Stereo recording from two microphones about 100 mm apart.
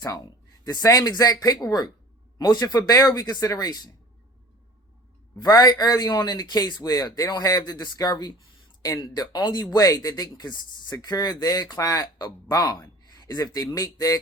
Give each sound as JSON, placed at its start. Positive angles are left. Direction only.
{"t": 0.6, "sound": "speech", "side_deg": 40}
{"t": 5.4, "sound": "a man's voice", "side_deg": 35}